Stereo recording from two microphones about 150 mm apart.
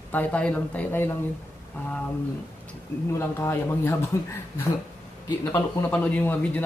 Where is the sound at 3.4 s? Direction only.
15° left (ahead or behind).